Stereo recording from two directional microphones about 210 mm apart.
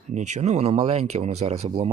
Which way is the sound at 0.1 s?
35° right (ahead or behind).